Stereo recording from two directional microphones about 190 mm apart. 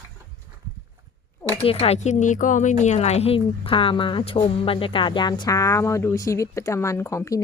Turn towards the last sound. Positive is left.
turn(degrees=15)  # may be behind; listen again after turning